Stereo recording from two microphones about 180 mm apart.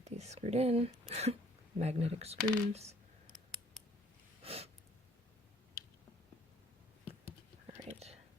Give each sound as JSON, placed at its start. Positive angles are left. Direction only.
{"t": 0.0, "sound": "speech", "side_deg": -35}
{"t": 4.4, "sound": "a sound", "side_deg": -35}
{"t": 7.7, "sound": "whispering", "side_deg": -35}